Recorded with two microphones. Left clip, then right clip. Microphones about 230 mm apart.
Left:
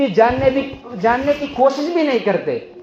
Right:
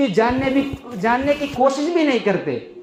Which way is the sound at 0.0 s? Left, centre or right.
Right.